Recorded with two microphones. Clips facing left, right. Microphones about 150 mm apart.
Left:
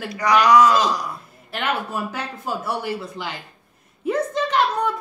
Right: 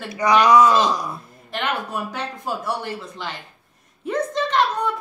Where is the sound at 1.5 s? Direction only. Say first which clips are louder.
Left 1 dB; 5° left (ahead or behind).